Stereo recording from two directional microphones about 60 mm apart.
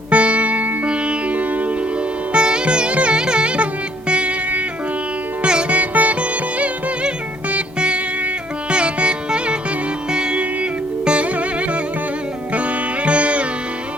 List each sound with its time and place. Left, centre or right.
0.1 s music: right
2.3 s sitar: centre
4.1 s music: centre
5.4 s sitar: centre
7.5 s music: centre
8.7 s sitar: centre
10.1 s music: centre
12.5 s sitar: right